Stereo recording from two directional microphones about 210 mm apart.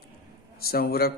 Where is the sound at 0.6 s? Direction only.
45° left (ahead or behind).